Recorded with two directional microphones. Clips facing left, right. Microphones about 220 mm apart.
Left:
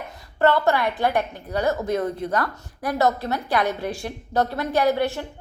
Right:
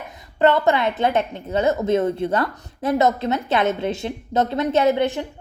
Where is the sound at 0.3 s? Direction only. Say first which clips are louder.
Right 2 dB; 20° right (ahead or behind).